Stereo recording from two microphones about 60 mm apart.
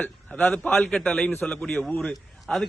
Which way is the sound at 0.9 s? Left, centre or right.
Centre.